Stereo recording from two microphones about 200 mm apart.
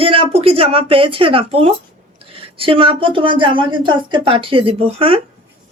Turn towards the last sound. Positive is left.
turn(degrees=-30)  # may be behind; listen again after turning